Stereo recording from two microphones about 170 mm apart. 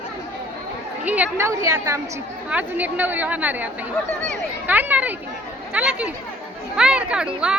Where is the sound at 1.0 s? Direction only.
10° right (ahead or behind).